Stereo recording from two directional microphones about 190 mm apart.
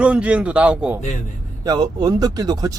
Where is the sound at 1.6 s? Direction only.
20° right (ahead or behind).